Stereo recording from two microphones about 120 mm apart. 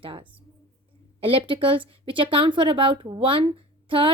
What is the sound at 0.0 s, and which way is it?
A woman's voice, 45° right (ahead or behind).